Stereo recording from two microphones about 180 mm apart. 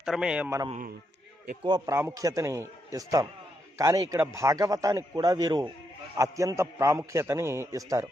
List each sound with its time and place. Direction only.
0.0 s a man's voice: 5° right (ahead or behind)
1.6 s a man's voice: 25° right (ahead or behind)